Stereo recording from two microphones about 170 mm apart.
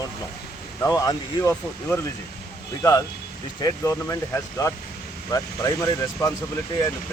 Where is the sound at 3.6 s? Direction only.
15° left (ahead or behind).